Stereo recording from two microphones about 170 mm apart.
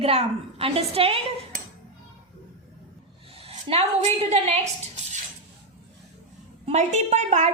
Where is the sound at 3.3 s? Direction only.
35° right (ahead or behind).